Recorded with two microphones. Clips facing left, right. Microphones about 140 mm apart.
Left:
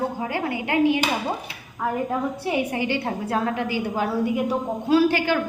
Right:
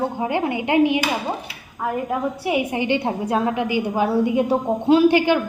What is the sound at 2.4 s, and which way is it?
A woman's voice, 15° right (ahead or behind).